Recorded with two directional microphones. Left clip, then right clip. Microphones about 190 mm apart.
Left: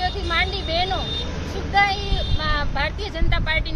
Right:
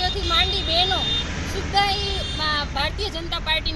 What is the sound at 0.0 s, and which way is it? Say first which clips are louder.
Vehicle: right 1 dB; centre (ahead or behind).